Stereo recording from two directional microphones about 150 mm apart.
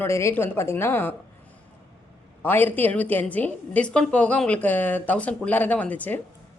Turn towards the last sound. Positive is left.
turn(degrees=10)  # may be behind; listen again after turning